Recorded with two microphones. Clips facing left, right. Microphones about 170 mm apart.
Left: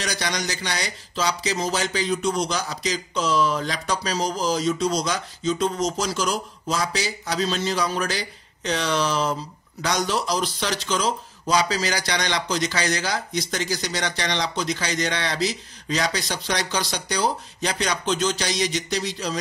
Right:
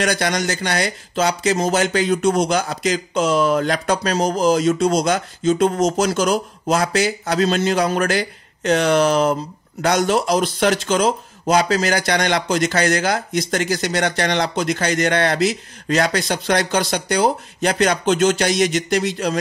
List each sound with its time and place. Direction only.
0.0 s speech: 55° right (ahead or behind)